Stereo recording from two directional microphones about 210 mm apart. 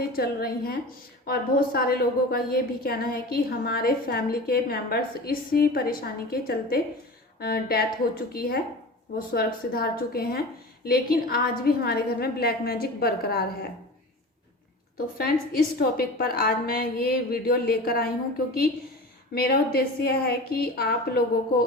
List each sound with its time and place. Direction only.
0.0 s a woman's voice: 45° left (ahead or behind)
14.9 s a woman's voice: 45° left (ahead or behind)
19.3 s a woman's voice: 45° left (ahead or behind)